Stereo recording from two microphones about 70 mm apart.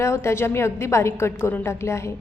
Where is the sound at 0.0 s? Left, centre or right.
Left.